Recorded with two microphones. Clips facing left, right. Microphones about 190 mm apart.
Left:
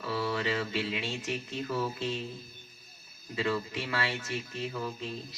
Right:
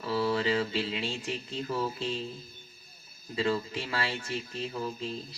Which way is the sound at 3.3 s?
30° right (ahead or behind).